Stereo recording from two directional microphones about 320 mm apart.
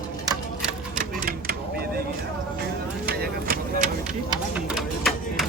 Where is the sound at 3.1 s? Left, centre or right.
Right.